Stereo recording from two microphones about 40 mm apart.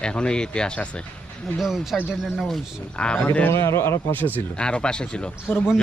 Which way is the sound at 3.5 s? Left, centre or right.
Left.